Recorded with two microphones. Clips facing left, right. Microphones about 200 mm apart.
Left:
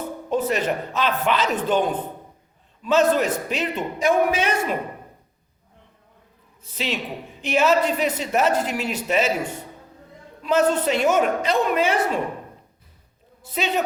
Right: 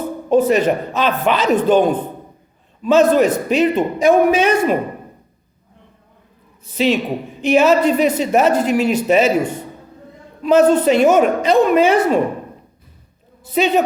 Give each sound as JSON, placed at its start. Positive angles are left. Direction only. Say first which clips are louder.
{"t": 0.3, "sound": "a woman's voice", "louder": "right 9 dB", "side_deg": -15}
{"t": 6.7, "sound": "a woman's voice", "louder": "right 11 dB", "side_deg": -10}
{"t": 13.4, "sound": "a woman's voice", "louder": "right 9 dB", "side_deg": -15}